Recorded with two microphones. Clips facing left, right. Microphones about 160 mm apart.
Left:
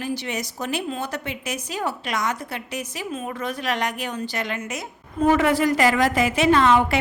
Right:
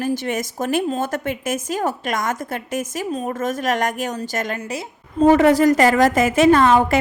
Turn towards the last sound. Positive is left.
turn(degrees=-45)  # may be behind; listen again after turning